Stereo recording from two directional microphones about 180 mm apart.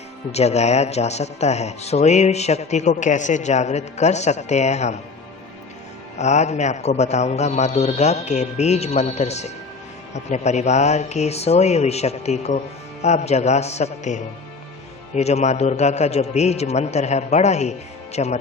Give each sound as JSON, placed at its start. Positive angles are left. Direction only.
{"t": 0.3, "sound": "speech", "side_deg": 35}
{"t": 6.1, "sound": "speech", "side_deg": 40}